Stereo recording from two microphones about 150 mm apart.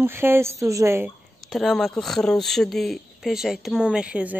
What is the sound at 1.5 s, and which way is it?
Speech, centre (ahead or behind).